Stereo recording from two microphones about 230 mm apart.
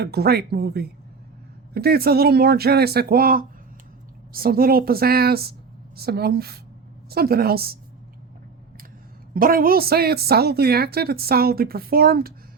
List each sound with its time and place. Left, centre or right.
0.0 s a woman's voice: right
9.3 s a woman's voice: right